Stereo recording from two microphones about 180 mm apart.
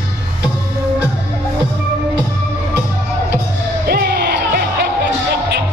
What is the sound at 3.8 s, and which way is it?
Music, 60° right (ahead or behind).